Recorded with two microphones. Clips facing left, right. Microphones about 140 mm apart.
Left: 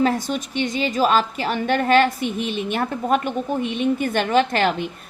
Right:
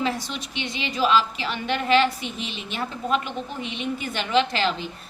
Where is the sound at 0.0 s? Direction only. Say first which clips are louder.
Left 7 dB; 45° left (ahead or behind).